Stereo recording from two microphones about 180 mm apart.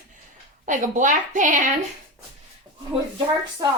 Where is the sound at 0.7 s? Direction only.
45° right (ahead or behind).